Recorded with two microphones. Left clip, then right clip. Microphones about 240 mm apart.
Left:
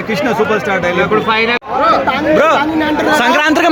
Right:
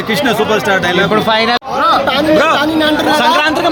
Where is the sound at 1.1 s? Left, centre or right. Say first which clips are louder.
Right 1 dB; right.